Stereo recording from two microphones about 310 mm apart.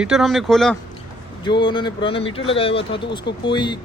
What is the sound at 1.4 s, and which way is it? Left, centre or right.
Speech, centre.